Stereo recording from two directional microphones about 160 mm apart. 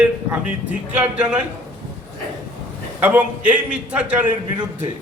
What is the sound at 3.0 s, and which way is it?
A man's voice, 10° right (ahead or behind).